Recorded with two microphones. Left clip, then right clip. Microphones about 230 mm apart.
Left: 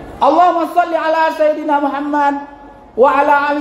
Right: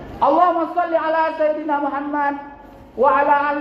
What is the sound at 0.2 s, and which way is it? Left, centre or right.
A man's voice, left.